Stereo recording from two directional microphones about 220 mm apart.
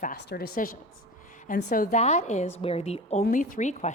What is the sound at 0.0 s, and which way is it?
A woman's voice, 45° left (ahead or behind).